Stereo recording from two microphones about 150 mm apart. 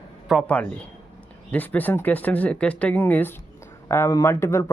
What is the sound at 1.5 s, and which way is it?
Speech, 10° left (ahead or behind).